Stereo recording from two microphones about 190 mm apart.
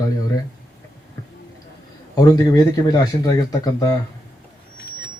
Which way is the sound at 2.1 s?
20° left (ahead or behind).